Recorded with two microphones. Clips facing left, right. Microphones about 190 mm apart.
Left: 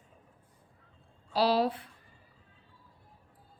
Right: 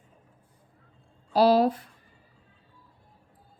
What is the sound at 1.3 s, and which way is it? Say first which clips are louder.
Speech: right 7 dB; 45° right (ahead or behind).